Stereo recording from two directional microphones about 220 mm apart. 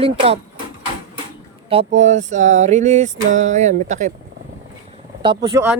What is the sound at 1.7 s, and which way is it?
Speech, 30° right (ahead or behind).